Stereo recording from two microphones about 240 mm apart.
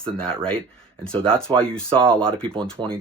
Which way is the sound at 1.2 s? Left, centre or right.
Centre.